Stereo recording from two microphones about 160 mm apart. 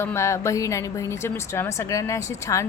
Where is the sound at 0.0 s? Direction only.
15° left (ahead or behind).